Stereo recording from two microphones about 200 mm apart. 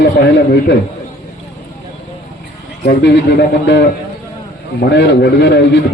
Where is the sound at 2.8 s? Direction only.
55° left (ahead or behind).